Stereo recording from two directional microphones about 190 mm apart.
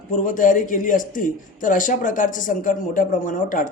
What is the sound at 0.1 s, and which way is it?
Speech, 45° left (ahead or behind).